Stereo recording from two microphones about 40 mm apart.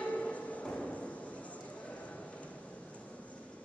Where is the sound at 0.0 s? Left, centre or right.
Left.